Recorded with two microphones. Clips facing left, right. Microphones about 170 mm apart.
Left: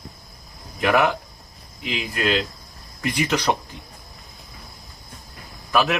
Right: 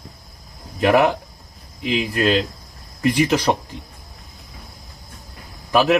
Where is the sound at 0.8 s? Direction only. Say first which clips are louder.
Right 4 dB; 30° right (ahead or behind).